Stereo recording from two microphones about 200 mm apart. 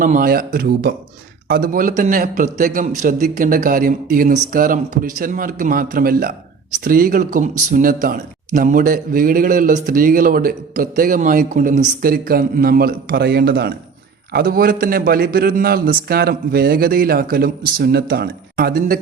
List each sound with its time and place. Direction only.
0.0 s a man's voice: 45° right (ahead or behind)